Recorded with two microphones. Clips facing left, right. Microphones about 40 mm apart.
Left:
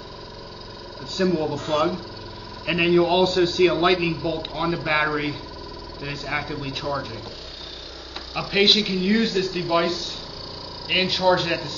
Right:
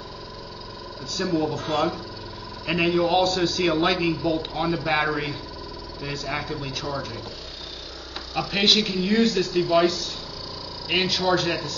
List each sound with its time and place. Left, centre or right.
1.2 s a man's voice: centre
3.4 s a man's voice: left
3.7 s a man's voice: centre
8.4 s a man's voice: centre